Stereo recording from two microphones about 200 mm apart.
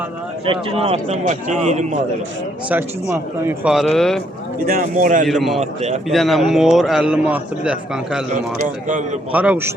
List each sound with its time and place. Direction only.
0.4 s a man's voice: 25° right (ahead or behind)
2.6 s a man's voice: 10° right (ahead or behind)
4.6 s a man's voice: 45° right (ahead or behind)
5.2 s a man's voice: centre (ahead or behind)
8.6 s a man's voice: 40° right (ahead or behind)
9.3 s speech: 5° right (ahead or behind)